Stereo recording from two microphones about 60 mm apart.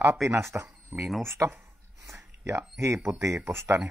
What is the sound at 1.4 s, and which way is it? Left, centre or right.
Speech, right.